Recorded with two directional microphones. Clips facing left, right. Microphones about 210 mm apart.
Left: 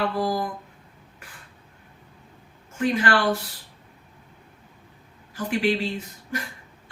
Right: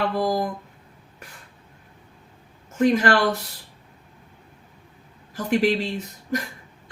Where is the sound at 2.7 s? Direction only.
40° right (ahead or behind).